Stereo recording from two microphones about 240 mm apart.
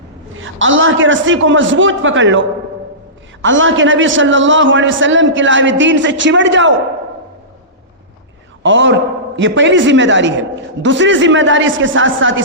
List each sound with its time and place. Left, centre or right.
0.3 s a man's voice: right
3.4 s a man's voice: right
8.6 s a man's voice: right